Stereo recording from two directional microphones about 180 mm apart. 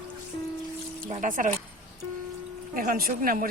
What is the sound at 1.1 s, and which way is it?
Speech, 40° right (ahead or behind).